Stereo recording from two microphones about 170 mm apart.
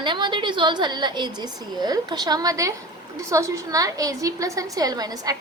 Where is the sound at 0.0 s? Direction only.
25° right (ahead or behind).